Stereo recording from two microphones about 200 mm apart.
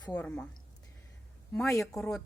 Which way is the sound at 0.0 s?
5° left (ahead or behind).